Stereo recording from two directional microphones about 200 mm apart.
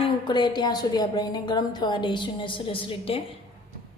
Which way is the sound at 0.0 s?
20° left (ahead or behind).